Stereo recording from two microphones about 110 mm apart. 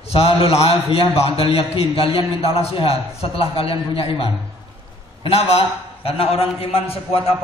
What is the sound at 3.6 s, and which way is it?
A man's voice, 60° left (ahead or behind).